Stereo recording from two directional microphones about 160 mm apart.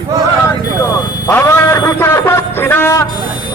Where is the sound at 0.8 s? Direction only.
20° left (ahead or behind).